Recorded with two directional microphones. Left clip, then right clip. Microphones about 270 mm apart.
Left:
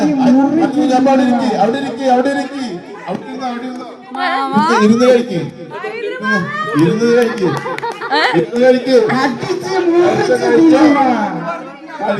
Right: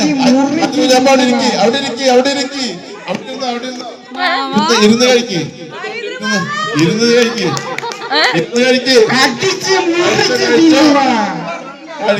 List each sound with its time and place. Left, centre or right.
0.0 s a sound: right
4.2 s music: centre
4.4 s a sound: centre
4.8 s speech: centre
6.0 s children playing: left
7.0 s speech: centre
7.5 s chatter: left
8.1 s speech: centre
8.4 s speech: centre